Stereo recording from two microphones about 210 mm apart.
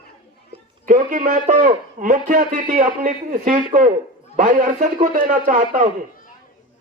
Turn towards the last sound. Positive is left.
turn(degrees=-40)  # may be behind; listen again after turning